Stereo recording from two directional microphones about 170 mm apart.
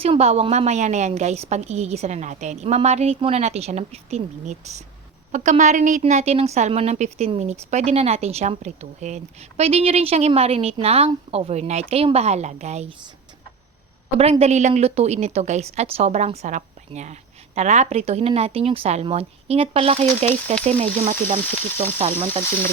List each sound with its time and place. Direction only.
0.0 s a woman's voice: 35° right (ahead or behind)
14.2 s a woman's voice: 40° right (ahead or behind)